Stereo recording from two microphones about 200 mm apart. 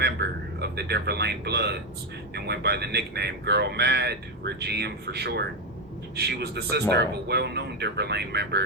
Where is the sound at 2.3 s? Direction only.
55° right (ahead or behind).